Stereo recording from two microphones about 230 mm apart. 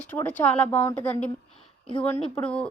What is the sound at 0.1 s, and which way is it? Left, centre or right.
A woman's voice, centre.